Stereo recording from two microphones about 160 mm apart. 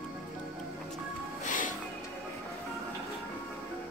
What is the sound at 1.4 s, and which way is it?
Music, 55° left (ahead or behind).